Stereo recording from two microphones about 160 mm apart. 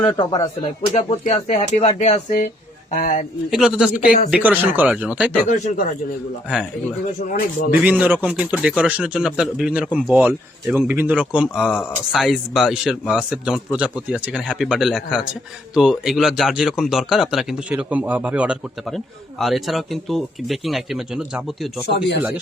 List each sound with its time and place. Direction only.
0.0 s speech: 30° left (ahead or behind); by 3.2 s 50° left (ahead or behind)
3.5 s speech: 5° right (ahead or behind)
5.5 s speech: 50° left (ahead or behind)
7.2 s speech: 60° left (ahead or behind)
7.9 s speech: 10° right (ahead or behind)
21.9 s speech: 90° left